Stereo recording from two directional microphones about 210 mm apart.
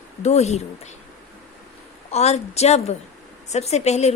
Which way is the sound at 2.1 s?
30° left (ahead or behind).